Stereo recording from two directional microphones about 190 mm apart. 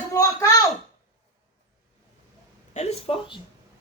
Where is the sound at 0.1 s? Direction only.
15° left (ahead or behind).